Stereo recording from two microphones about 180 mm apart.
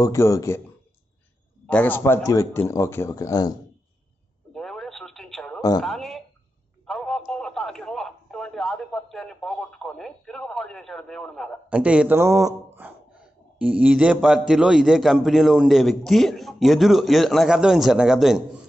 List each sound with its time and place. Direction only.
0.0 s a man's voice: 15° left (ahead or behind)
1.7 s a man's voice: 10° left (ahead or behind)
4.6 s radio: centre (ahead or behind)
5.8 s a man's voice: centre (ahead or behind)